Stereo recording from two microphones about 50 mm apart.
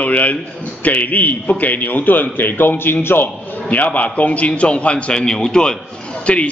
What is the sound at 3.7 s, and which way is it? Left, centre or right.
A man's voice, left.